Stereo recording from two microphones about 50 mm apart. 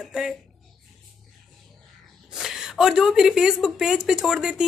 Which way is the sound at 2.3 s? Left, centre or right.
Centre.